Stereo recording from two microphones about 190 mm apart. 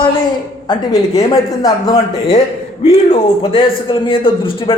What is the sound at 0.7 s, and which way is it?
Speech, 25° left (ahead or behind).